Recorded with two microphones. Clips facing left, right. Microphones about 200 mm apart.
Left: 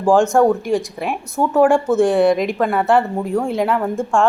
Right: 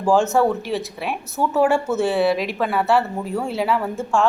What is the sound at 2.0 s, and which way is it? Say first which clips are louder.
Speech: left 5 dB; 5° right (ahead or behind).